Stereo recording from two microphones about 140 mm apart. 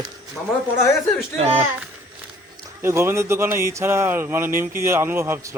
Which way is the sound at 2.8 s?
20° right (ahead or behind).